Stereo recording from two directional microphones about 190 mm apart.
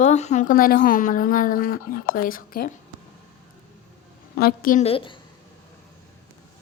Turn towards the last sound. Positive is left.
turn(degrees=25)  # may be behind; listen again after turning